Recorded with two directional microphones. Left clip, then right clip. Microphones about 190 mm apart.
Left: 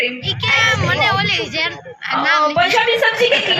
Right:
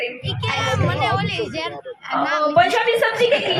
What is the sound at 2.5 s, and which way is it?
Speech, 65° right (ahead or behind).